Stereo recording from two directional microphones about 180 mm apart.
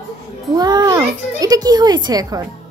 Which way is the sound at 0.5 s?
20° right (ahead or behind).